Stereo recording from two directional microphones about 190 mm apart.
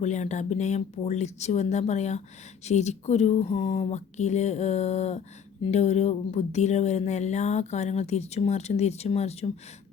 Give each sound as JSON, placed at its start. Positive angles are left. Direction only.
{"t": 0.0, "sound": "speech", "side_deg": 40}